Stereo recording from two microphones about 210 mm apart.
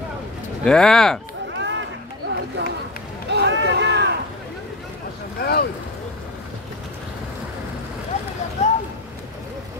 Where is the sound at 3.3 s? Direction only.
55° right (ahead or behind).